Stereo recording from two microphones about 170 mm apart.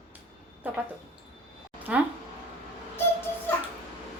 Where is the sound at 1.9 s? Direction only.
5° right (ahead or behind).